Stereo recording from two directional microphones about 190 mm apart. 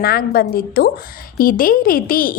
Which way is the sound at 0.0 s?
55° left (ahead or behind).